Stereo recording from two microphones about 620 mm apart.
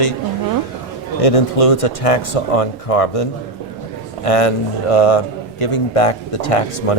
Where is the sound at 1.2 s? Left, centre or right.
Left.